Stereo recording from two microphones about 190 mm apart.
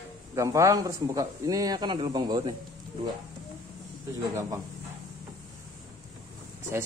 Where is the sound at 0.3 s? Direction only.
15° right (ahead or behind).